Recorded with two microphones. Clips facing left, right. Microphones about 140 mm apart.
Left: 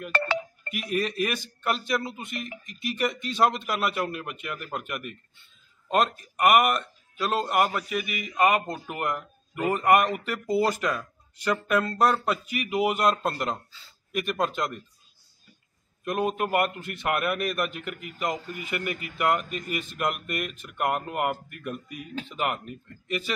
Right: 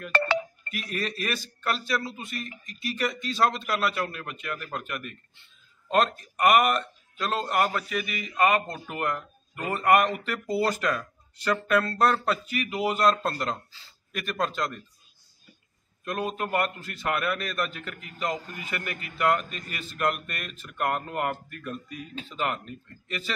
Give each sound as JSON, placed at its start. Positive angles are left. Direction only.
{"t": 0.1, "sound": "speech", "side_deg": -80}
{"t": 0.8, "sound": "a man's voice", "side_deg": 15}
{"t": 16.0, "sound": "a man's voice", "side_deg": 15}